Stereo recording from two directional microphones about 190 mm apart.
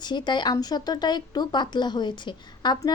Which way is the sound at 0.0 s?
25° left (ahead or behind).